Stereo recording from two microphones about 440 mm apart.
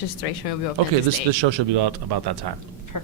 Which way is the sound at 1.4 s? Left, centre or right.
Right.